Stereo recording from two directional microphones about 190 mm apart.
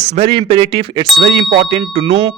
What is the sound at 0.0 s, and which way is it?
A man's voice, 35° right (ahead or behind).